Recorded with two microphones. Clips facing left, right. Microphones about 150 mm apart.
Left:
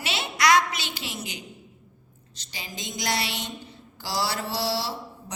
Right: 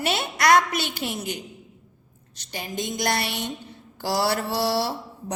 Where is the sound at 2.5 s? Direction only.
55° right (ahead or behind).